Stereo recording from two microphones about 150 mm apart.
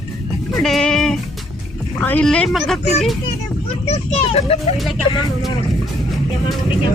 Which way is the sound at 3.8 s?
45° left (ahead or behind).